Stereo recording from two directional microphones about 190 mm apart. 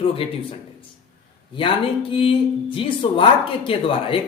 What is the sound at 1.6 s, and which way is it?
Speech, 30° left (ahead or behind).